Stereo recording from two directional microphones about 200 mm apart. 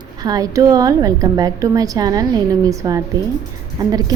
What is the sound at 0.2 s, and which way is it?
A woman's voice, 20° right (ahead or behind).